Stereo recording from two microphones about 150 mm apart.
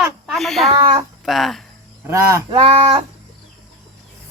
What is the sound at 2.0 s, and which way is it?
Speech, 20° right (ahead or behind).